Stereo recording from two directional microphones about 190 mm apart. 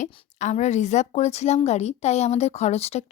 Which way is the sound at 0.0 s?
40° left (ahead or behind).